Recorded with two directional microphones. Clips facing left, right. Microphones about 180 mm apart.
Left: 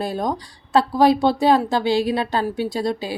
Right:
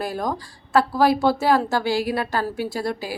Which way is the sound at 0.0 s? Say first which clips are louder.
Left 2 dB; 20° left (ahead or behind).